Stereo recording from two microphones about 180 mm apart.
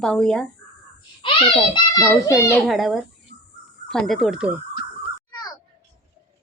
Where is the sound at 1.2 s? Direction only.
30° left (ahead or behind).